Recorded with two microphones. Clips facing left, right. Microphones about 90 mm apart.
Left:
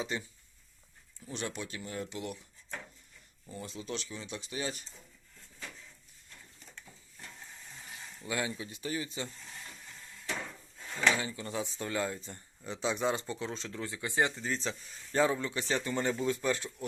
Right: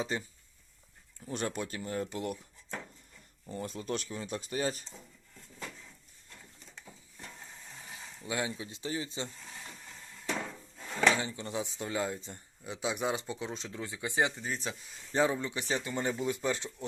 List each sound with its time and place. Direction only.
0.0 s speech: 35° right (ahead or behind)
3.5 s speech: 45° right (ahead or behind)
7.9 s speech: 25° right (ahead or behind)
11.1 s speech: 25° right (ahead or behind)
12.6 s a man's voice: 10° right (ahead or behind)